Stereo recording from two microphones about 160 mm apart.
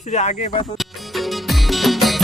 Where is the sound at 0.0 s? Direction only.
45° left (ahead or behind).